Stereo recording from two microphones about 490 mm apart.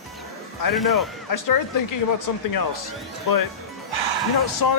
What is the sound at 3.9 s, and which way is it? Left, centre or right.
Music, right.